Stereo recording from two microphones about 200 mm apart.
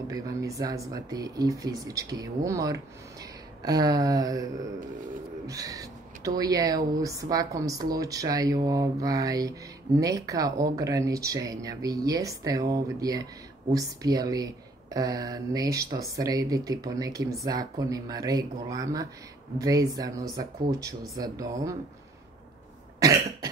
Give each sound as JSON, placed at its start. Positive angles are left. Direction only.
{"t": 0.1, "sound": "speech", "side_deg": -15}
{"t": 5.5, "sound": "speech", "side_deg": -15}
{"t": 22.9, "sound": "cough", "side_deg": -15}